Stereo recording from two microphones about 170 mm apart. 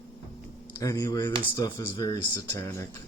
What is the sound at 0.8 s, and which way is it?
Speech, 20° left (ahead or behind).